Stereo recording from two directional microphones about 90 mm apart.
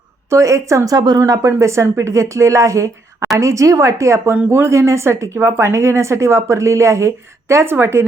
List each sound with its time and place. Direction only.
0.3 s speech: 35° right (ahead or behind)
0.9 s speech: 45° right (ahead or behind); by 8.0 s 25° right (ahead or behind)